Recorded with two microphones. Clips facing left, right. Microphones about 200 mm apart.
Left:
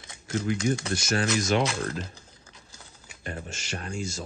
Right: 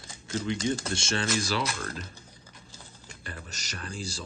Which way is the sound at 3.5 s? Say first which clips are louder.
Left 5 dB; 40° right (ahead or behind).